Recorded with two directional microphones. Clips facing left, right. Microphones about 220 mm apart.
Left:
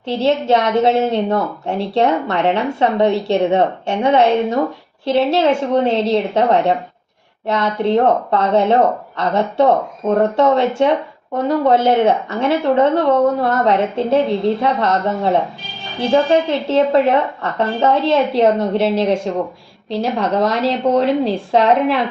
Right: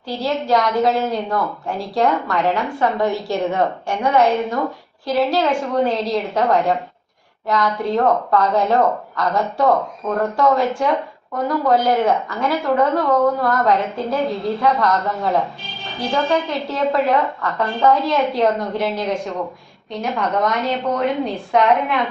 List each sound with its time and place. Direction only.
0.0 s a woman's voice: 25° left (ahead or behind)